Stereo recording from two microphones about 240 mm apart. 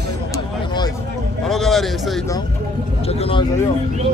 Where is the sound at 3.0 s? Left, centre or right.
Left.